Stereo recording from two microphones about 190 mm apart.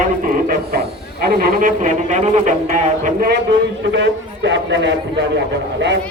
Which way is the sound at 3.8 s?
65° right (ahead or behind).